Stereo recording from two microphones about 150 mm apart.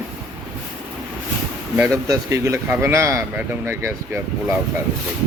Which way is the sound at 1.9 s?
25° right (ahead or behind).